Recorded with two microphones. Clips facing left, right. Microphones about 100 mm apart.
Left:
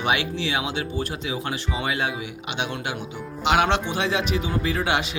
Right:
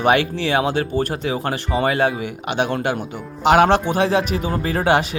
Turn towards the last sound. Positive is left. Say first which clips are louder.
# right 6 dB
turn(degrees=-45)  # may be behind; listen again after turning